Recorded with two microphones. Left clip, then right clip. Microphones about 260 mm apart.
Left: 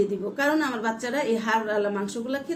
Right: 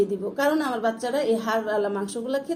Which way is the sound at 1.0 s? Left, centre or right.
Centre.